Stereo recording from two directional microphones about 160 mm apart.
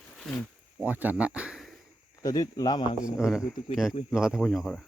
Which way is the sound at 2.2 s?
20° left (ahead or behind).